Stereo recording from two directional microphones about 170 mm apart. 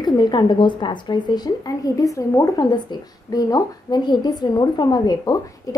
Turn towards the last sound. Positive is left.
turn(degrees=20)  # may be behind; listen again after turning